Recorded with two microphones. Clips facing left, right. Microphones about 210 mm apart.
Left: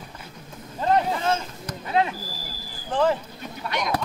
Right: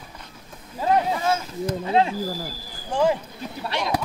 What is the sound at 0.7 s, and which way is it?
Boat, 10° right (ahead or behind).